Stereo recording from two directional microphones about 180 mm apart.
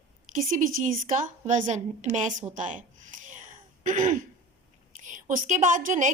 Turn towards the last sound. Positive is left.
turn(degrees=-45)  # may be behind; listen again after turning